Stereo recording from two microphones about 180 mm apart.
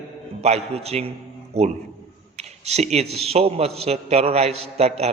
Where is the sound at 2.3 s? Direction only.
35° right (ahead or behind).